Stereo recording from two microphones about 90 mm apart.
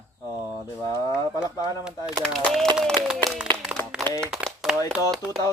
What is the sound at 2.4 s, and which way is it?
Speech, 5° left (ahead or behind).